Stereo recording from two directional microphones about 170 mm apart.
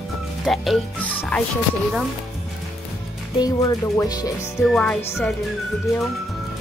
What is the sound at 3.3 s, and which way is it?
Speech, 20° left (ahead or behind).